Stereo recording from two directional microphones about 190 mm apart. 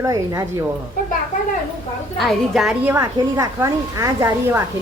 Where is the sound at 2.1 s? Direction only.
Centre (ahead or behind).